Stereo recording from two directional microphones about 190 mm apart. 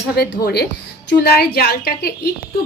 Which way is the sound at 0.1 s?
55° left (ahead or behind).